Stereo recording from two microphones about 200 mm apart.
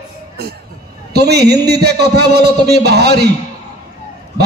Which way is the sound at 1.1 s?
55° right (ahead or behind).